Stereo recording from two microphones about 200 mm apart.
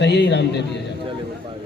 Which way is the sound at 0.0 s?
60° left (ahead or behind).